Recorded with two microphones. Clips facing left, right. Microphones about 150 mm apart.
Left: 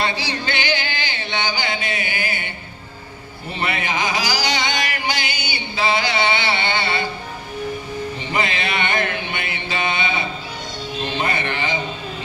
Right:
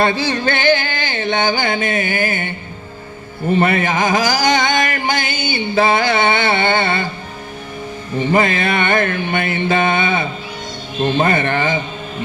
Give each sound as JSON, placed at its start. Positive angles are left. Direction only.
{"t": 0.0, "sound": "music", "side_deg": -50}
{"t": 3.5, "sound": "a sound", "side_deg": -50}
{"t": 8.2, "sound": "music", "side_deg": -50}